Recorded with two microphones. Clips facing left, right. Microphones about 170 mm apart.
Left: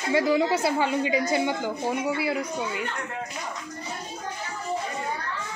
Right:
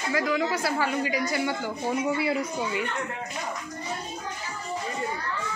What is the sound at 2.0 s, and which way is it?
Speech, centre (ahead or behind).